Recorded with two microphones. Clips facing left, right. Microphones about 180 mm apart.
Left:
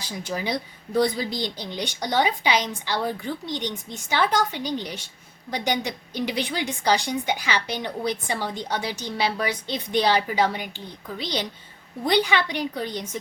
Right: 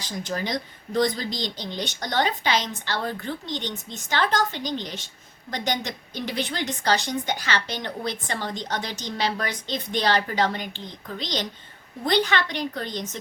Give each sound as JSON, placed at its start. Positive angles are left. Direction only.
{"t": 0.0, "sound": "a woman's voice", "side_deg": 10}